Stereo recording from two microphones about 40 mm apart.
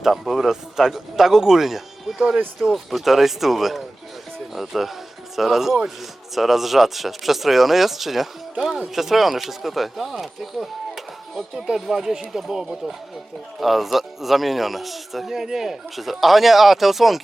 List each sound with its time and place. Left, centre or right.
0.0 s speech: centre
11.5 s speech: centre